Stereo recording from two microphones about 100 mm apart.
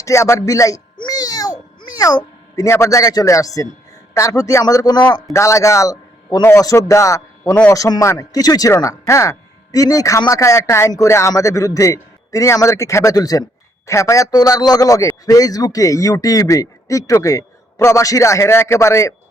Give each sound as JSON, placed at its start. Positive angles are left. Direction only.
{"t": 0.0, "sound": "a man's voice", "side_deg": 30}
{"t": 0.9, "sound": "a sound", "side_deg": 45}
{"t": 1.8, "sound": "a man's voice", "side_deg": 40}